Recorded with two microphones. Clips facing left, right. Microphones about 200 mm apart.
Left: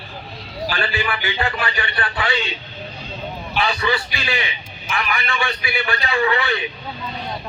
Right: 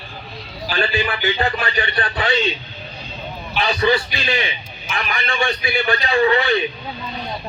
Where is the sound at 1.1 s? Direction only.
35° right (ahead or behind).